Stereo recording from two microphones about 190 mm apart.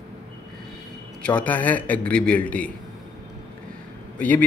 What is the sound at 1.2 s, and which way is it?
A man's voice, 10° left (ahead or behind).